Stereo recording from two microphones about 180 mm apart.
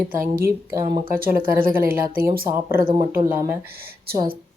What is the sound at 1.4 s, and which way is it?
Speech, 50° right (ahead or behind).